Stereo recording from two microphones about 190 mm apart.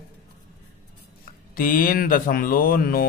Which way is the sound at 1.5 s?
45° left (ahead or behind).